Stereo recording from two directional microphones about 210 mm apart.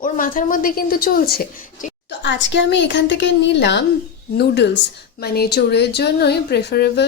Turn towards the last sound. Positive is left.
turn(degrees=50)  # may be behind; listen again after turning